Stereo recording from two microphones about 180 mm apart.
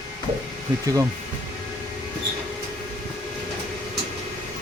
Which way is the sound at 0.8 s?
20° right (ahead or behind).